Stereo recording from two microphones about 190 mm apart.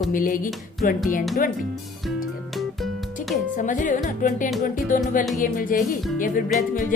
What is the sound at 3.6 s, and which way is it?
A woman's voice, 45° left (ahead or behind).